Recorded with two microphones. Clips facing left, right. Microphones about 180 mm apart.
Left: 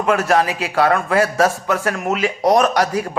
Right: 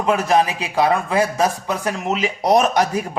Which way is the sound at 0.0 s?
20° right (ahead or behind).